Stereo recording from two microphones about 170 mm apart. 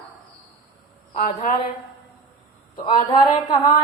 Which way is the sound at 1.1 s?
50° left (ahead or behind).